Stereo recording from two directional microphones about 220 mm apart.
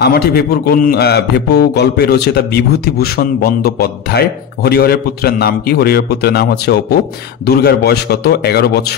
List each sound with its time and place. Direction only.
0.0 s a man's voice: 45° left (ahead or behind)